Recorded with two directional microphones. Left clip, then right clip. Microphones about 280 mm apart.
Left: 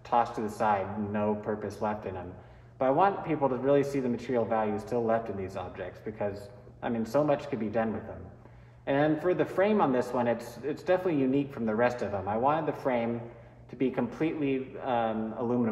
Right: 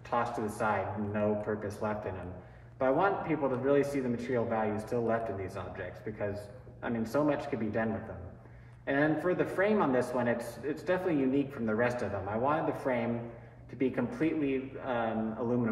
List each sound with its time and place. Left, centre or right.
0.1 s speech: left